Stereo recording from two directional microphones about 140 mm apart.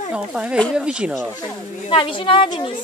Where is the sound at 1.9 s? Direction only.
40° left (ahead or behind).